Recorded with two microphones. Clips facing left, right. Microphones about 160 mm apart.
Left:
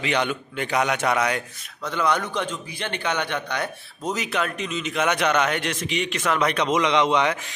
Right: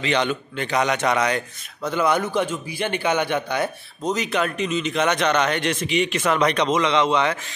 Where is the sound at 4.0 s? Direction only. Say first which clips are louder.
Right 3 dB; 5° left (ahead or behind).